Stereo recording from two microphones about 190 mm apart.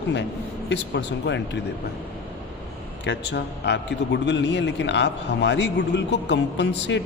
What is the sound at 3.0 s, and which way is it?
A man's voice, 65° left (ahead or behind).